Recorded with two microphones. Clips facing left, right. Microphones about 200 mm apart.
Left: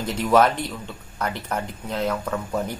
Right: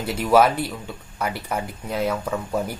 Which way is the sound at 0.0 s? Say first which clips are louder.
Right 1 dB; 10° right (ahead or behind).